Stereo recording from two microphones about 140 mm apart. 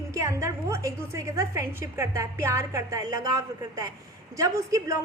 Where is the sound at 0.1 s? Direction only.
20° right (ahead or behind).